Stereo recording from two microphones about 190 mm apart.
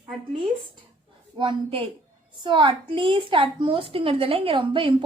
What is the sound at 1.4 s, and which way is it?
A woman's voice, 25° right (ahead or behind).